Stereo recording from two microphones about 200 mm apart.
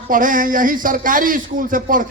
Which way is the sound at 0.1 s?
40° right (ahead or behind).